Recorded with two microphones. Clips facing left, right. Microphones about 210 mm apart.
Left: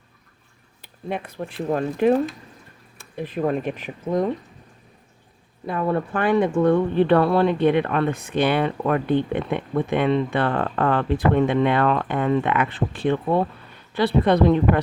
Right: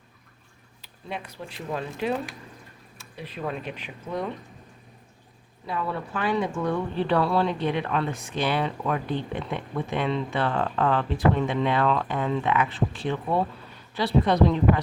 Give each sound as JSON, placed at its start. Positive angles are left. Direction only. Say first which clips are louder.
{"t": 0.8, "sound": "speech", "louder": "left 7 dB", "side_deg": 55}
{"t": 5.6, "sound": "speech", "louder": "left 7 dB", "side_deg": 50}